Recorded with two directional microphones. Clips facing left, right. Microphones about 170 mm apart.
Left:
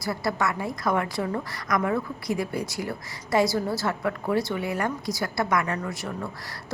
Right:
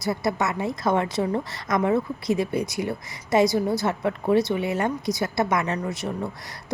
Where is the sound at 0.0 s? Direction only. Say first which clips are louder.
Right 2 dB; 20° right (ahead or behind).